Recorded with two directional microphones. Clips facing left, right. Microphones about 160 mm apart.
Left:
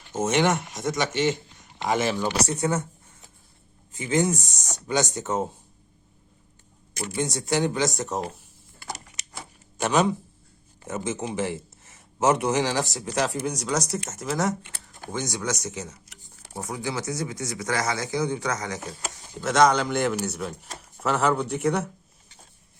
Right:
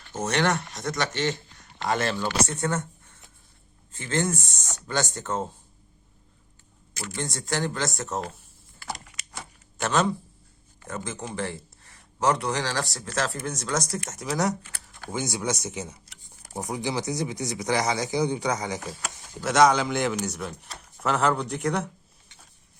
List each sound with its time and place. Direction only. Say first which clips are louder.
0.0 s speech: left 3 dB; 20° left (ahead or behind)
0.9 s speech: left 3 dB; 10° left (ahead or behind)
3.9 s speech: left 4 dB; 15° left (ahead or behind)
6.9 s speech: left 5 dB; 15° left (ahead or behind)
7.4 s speech: left 4 dB; centre (ahead or behind)
9.7 s a man's voice: left 2 dB; 15° left (ahead or behind)
15.1 s speech: right 1 dB; 10° right (ahead or behind)
15.6 s a sound: even; 15° right (ahead or behind)
16.5 s speech: right 1 dB; 15° right (ahead or behind)
19.4 s speech: even; centre (ahead or behind)